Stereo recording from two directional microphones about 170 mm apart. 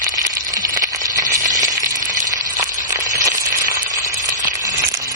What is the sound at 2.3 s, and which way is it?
Sizzle, 20° right (ahead or behind).